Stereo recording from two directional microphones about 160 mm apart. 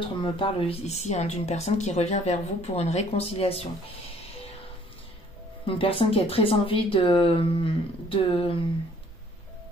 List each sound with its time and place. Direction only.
0.0 s speech: 30° left (ahead or behind)
5.7 s speech: 35° left (ahead or behind)